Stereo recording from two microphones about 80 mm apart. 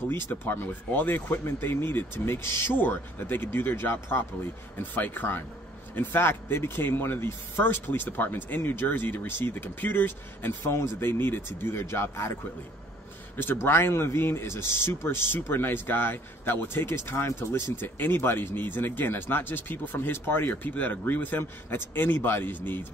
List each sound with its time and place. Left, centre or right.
0.1 s speech: left
13.4 s speech: left